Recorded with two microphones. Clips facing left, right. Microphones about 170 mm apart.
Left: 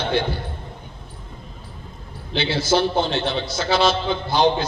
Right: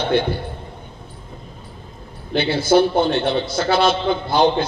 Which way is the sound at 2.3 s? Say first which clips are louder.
Right 5 dB; 55° right (ahead or behind).